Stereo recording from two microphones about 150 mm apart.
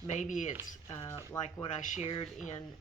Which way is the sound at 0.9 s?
20° left (ahead or behind).